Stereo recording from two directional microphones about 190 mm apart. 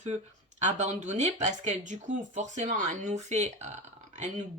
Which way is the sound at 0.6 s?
40° right (ahead or behind).